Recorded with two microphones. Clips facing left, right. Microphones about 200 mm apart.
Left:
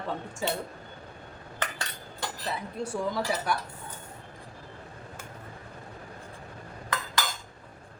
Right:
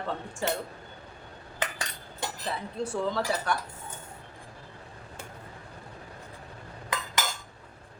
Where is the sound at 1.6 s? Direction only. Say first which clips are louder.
Right 1 dB; 20° right (ahead or behind).